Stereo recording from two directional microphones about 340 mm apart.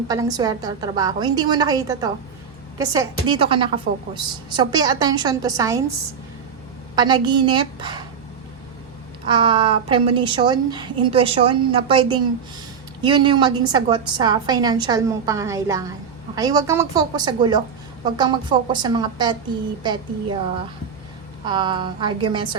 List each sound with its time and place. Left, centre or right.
0.1 s a woman's voice: centre
6.9 s a woman's voice: centre
9.2 s a woman's voice: centre
21.4 s a woman's voice: centre